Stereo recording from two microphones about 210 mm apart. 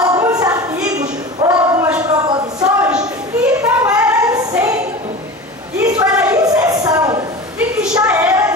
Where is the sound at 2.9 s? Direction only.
5° right (ahead or behind).